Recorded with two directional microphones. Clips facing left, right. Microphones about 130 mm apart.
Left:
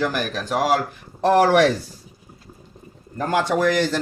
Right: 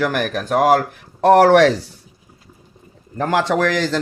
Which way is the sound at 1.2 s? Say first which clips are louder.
Right 5 dB; 70° right (ahead or behind).